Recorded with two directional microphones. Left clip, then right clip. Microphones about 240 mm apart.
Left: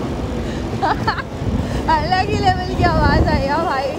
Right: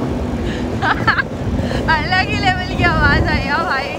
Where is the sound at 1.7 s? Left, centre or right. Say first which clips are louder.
Right 1 dB; left.